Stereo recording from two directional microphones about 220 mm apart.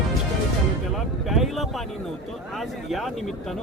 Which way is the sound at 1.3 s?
Centre (ahead or behind).